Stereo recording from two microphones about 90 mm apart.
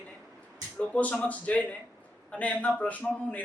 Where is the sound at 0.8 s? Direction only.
15° left (ahead or behind).